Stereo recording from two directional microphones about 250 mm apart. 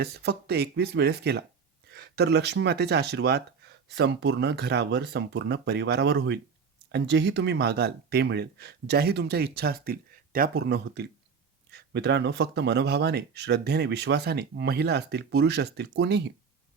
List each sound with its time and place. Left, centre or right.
0.0 s speech: right